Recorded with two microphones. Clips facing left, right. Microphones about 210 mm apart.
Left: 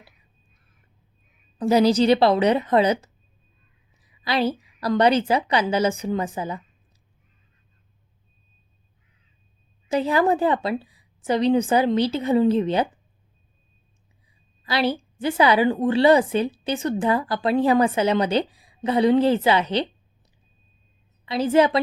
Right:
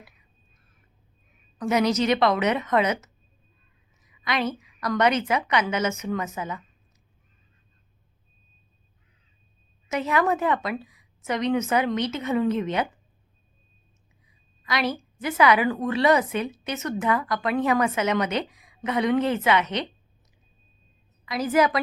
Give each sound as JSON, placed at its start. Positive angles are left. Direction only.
{"t": 1.5, "sound": "a woman's voice", "side_deg": 30}
{"t": 9.9, "sound": "a woman's voice", "side_deg": 30}
{"t": 14.6, "sound": "a woman's voice", "side_deg": 30}
{"t": 21.2, "sound": "a woman's voice", "side_deg": 30}